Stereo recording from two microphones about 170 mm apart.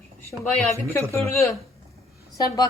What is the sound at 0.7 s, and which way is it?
Speech, 10° left (ahead or behind).